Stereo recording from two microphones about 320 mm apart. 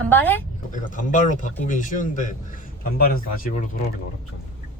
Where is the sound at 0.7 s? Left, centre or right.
Left.